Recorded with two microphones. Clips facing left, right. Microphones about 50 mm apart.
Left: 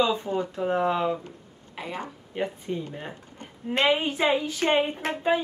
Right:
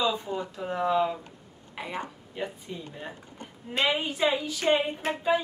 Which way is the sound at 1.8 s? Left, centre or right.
Centre.